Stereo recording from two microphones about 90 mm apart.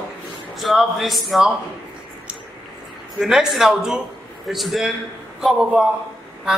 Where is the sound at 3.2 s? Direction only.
5° right (ahead or behind).